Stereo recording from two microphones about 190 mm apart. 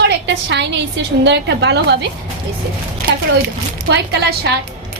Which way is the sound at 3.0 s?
55° right (ahead or behind).